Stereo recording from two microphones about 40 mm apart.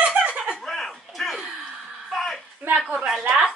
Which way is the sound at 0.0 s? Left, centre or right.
Right.